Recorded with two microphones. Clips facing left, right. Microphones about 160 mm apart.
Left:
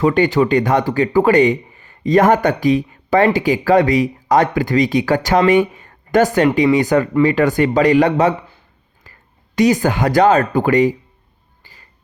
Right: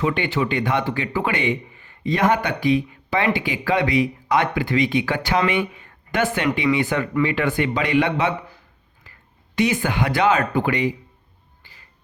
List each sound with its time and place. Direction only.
0.0 s speech: 40° left (ahead or behind)
9.1 s whispering: 40° left (ahead or behind)
9.6 s speech: 40° left (ahead or behind)
11.6 s music: 45° left (ahead or behind)